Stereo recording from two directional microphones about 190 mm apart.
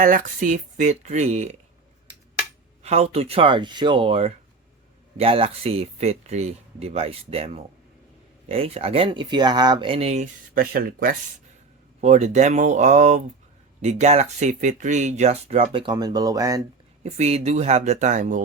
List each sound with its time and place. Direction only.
0.0 s speech: 45° right (ahead or behind)
2.8 s speech: 35° right (ahead or behind)
10.5 s speech: 50° right (ahead or behind)
11.9 s speech: 40° right (ahead or behind); by 16.6 s 20° right (ahead or behind)
17.0 s speech: 35° right (ahead or behind)